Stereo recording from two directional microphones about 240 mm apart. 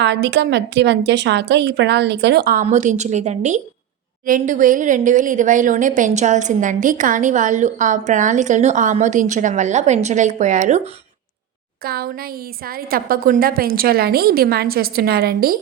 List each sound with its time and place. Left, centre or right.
0.0 s a woman's voice: right
11.8 s a woman's voice: right